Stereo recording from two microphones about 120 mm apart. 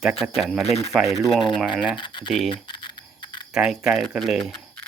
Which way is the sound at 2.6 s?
40° left (ahead or behind).